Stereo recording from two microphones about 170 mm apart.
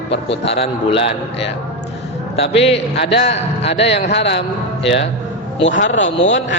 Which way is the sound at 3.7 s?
90° left.